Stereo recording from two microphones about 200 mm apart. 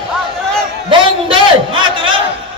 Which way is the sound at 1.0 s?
25° right (ahead or behind).